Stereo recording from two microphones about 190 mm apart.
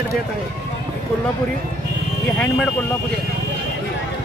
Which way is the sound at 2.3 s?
5° left (ahead or behind).